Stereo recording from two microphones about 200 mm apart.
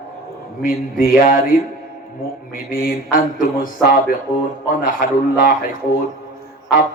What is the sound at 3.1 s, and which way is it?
Speech, 45° left (ahead or behind).